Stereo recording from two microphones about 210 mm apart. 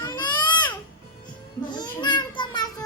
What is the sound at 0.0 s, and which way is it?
Baby cry, 20° left (ahead or behind).